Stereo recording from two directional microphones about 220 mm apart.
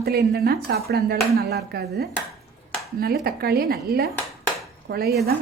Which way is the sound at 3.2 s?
45° right (ahead or behind).